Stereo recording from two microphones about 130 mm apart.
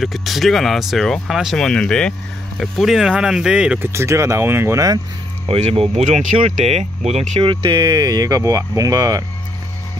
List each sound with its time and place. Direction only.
0.0 s speech: centre (ahead or behind)
3.9 s speech: 20° right (ahead or behind)
5.5 s speech: 50° right (ahead or behind)
7.4 s speech: 35° right (ahead or behind)